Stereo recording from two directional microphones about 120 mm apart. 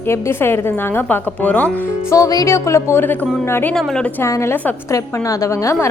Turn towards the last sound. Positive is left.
turn(degrees=25)  # may be behind; listen again after turning